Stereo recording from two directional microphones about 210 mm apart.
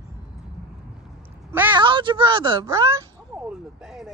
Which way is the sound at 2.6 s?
15° right (ahead or behind).